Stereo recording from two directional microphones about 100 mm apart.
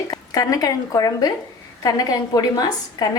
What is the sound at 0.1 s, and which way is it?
A woman's voice, 40° left (ahead or behind).